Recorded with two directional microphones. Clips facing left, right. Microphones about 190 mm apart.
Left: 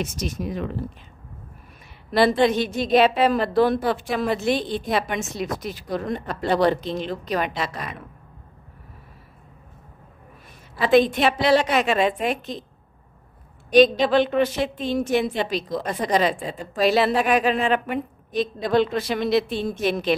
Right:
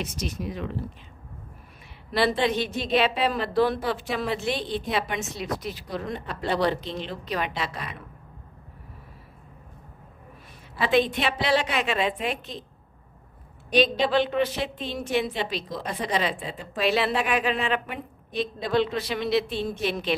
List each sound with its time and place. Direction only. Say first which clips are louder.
0.0 s a woman's voice: left 4 dB; 45° left (ahead or behind)
2.1 s a woman's voice: left 5 dB; 45° left (ahead or behind)
10.9 s a woman's voice: left 6 dB; 45° left (ahead or behind)
13.7 s a woman's voice: left 6 dB; 45° left (ahead or behind)